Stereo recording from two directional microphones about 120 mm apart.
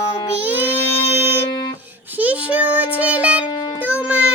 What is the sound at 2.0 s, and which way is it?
Child singing, 15° right (ahead or behind).